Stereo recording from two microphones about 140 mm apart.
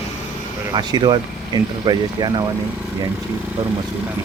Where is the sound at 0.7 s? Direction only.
30° right (ahead or behind).